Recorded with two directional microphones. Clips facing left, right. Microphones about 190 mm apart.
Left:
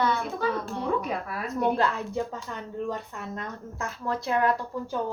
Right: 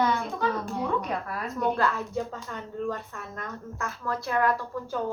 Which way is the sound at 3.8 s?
20° left (ahead or behind).